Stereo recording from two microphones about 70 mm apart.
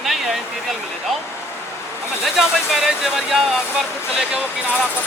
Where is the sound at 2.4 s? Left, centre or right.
Centre.